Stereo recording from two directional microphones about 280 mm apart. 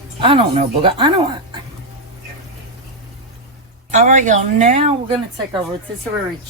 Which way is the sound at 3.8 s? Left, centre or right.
Right.